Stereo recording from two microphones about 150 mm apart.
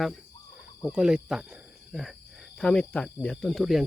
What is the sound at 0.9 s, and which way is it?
Speech, 5° right (ahead or behind).